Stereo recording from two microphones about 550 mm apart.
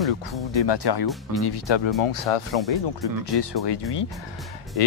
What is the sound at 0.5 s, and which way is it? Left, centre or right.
Speech, left.